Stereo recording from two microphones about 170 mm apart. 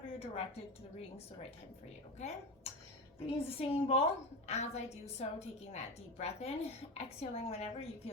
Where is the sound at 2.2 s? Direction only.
40° left (ahead or behind).